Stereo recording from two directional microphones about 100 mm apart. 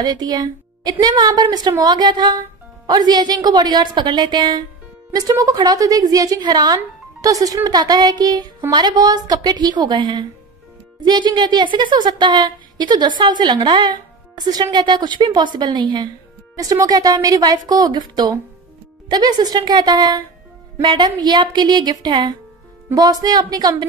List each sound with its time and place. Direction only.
0.0 s a woman's voice: 40° right (ahead or behind)
16.8 s a woman's voice: 40° right (ahead or behind)